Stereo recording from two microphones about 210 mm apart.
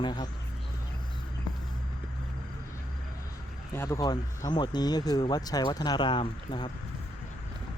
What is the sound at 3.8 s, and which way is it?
Speech, 15° left (ahead or behind).